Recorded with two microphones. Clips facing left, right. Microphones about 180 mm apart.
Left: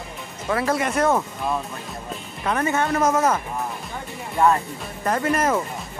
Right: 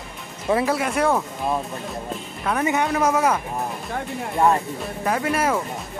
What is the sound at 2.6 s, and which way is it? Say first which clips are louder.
Speech: even; 15° right (ahead or behind).